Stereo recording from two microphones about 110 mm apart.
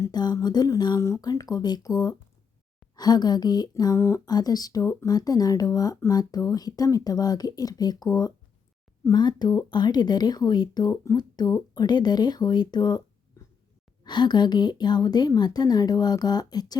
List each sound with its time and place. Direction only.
0.1 s speech: 40° left (ahead or behind)
14.0 s speech: 40° left (ahead or behind)